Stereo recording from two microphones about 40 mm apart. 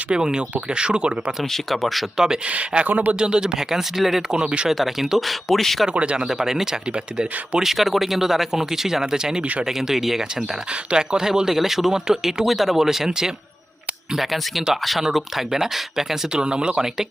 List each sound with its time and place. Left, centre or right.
0.1 s speech: centre
1.5 s speech: centre
2.1 s speech: centre
2.5 s speech: right
3.2 s speech: right; by 4.2 s centre
4.3 s speech: right
4.7 s speech: centre
5.9 s speech: right
6.2 s speech: centre
10.9 s speech: centre
14.2 s speech: centre
16.3 s speech: right